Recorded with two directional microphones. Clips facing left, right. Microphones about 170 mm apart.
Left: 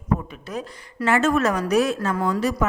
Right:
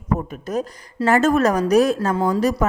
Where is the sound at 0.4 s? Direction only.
45° right (ahead or behind).